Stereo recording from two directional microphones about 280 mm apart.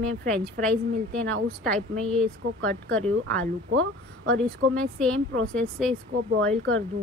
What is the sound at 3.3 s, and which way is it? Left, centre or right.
Speech, right.